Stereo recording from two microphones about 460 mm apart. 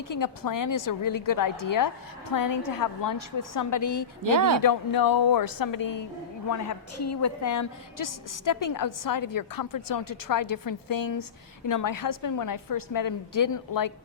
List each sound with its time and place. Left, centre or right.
0.1 s a woman's voice: left
4.2 s speech: right
4.6 s a woman's voice: left